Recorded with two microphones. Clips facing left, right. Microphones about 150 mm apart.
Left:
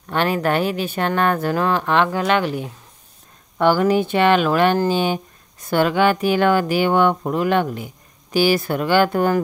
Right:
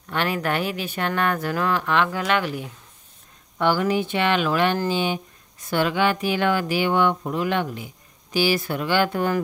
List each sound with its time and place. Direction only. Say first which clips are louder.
0.1 s speech: left 5 dB; 35° left (ahead or behind)
3.5 s speech: left 5 dB; 45° left (ahead or behind)